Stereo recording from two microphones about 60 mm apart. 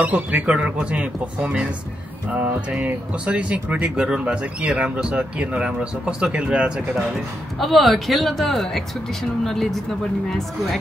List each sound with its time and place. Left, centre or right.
0.0 s speech: right
7.5 s speech: centre